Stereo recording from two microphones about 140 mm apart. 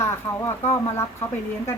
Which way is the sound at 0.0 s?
20° left (ahead or behind).